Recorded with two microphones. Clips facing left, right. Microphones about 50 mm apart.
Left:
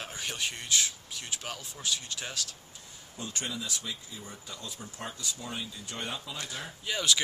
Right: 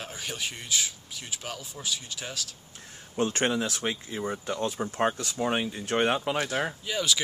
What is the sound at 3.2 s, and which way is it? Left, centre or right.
Speech, right.